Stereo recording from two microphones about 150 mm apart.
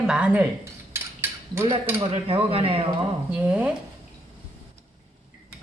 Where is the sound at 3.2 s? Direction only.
10° right (ahead or behind).